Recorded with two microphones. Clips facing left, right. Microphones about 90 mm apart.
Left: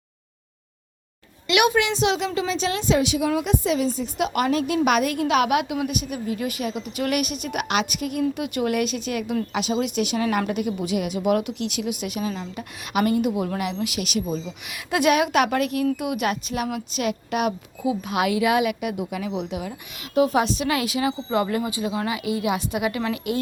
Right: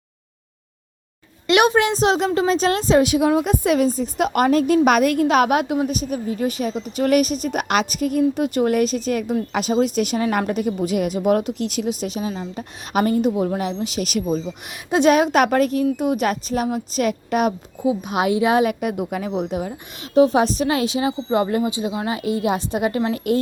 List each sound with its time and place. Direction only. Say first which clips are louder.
1.5 s a woman's voice: right 4 dB; 35° right (ahead or behind)
12.9 s a woman's voice: right 3 dB; 40° right (ahead or behind)
14.4 s a woman's voice: right 4 dB; 30° right (ahead or behind)